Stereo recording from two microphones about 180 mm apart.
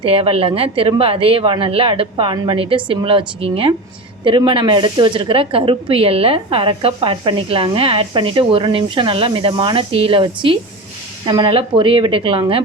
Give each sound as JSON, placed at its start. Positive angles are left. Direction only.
{"t": 0.0, "sound": "speech", "side_deg": -30}